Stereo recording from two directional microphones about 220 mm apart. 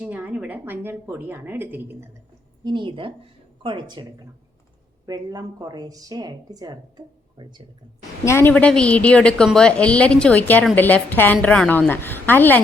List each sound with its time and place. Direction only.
0.0 s a woman's voice: 5° right (ahead or behind)
2.6 s a woman's voice: 20° right (ahead or behind)
5.0 s a woman's voice: 15° right (ahead or behind)
8.2 s a woman's voice: 10° left (ahead or behind)